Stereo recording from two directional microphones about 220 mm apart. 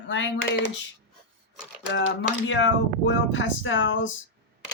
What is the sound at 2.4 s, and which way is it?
Speech, 55° left (ahead or behind).